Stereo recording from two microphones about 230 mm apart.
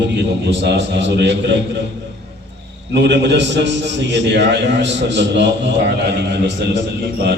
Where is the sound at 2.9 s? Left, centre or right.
Right.